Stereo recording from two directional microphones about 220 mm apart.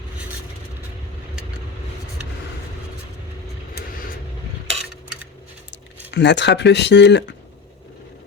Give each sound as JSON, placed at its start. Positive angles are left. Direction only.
{"t": 6.1, "sound": "speech", "side_deg": 50}